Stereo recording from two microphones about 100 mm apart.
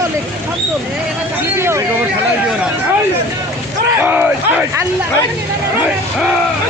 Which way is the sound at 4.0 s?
15° right (ahead or behind).